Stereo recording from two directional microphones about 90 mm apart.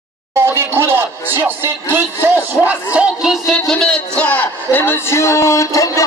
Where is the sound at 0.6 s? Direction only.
25° right (ahead or behind).